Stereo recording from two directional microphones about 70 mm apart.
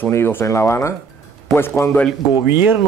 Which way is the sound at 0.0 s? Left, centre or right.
Left.